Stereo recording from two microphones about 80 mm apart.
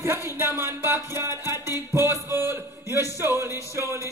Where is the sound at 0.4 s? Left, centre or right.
Right.